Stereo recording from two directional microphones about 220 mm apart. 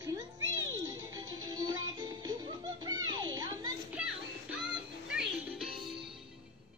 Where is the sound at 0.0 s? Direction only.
15° right (ahead or behind).